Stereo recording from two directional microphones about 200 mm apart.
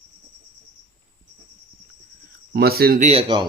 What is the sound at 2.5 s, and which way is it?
Mantra, 50° right (ahead or behind).